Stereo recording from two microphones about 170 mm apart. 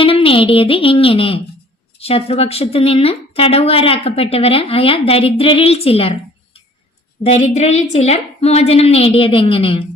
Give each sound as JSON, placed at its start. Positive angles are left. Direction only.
{"t": 0.0, "sound": "a woman's voice", "side_deg": 30}
{"t": 7.3, "sound": "a woman's voice", "side_deg": 35}